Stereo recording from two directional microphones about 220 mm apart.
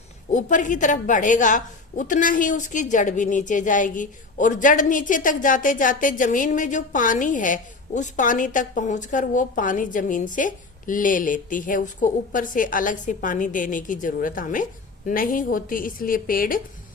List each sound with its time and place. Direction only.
0.3 s a woman's voice: 35° left (ahead or behind)